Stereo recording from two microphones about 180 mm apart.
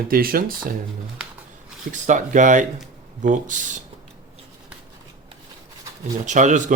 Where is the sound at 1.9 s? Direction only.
45° right (ahead or behind).